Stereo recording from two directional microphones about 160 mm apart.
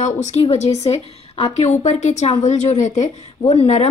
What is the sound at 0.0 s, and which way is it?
A woman's voice, 45° left (ahead or behind).